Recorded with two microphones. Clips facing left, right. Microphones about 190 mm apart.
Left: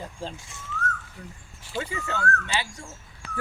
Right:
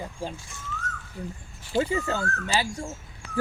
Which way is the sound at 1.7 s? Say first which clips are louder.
Right 6 dB; 35° right (ahead or behind).